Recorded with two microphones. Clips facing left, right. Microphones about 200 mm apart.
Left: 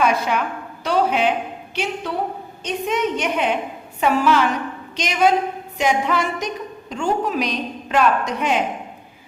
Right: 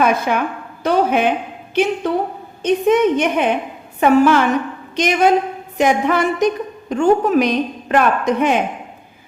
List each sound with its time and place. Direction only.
0.0 s a woman's voice: 50° right (ahead or behind)